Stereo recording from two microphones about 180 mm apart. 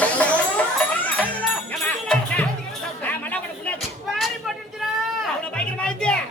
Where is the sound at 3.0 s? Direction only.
10° left (ahead or behind).